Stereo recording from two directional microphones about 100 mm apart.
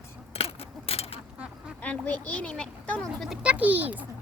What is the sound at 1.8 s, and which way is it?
Speech, 15° left (ahead or behind).